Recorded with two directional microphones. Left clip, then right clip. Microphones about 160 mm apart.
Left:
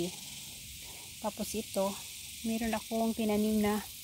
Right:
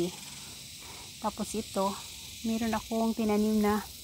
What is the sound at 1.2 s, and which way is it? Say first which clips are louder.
Speech: right 3 dB; 20° left (ahead or behind).